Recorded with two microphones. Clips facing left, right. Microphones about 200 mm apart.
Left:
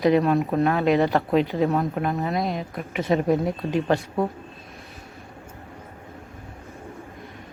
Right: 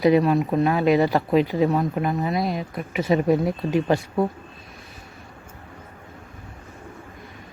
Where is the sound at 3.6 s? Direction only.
15° right (ahead or behind).